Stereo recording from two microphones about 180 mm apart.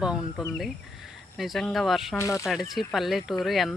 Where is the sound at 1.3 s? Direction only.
Centre (ahead or behind).